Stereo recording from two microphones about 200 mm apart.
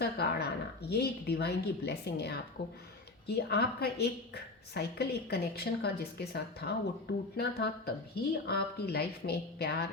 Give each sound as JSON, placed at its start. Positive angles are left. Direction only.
{"t": 0.0, "sound": "a woman's voice", "side_deg": 55}